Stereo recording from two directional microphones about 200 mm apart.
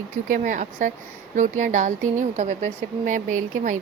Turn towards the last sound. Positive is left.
turn(degrees=-40)  # may be behind; listen again after turning